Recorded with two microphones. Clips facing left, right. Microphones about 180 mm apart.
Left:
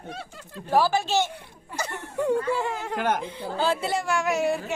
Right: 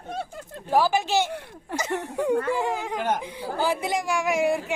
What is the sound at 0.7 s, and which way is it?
A woman's voice, 15° right (ahead or behind).